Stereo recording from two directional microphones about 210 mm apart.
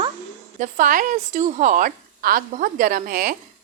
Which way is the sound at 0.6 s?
40° right (ahead or behind).